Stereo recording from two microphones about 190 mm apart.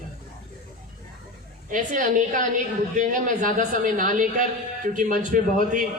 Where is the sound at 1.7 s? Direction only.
45° right (ahead or behind).